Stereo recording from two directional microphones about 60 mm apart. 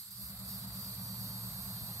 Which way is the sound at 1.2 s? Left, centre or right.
Right.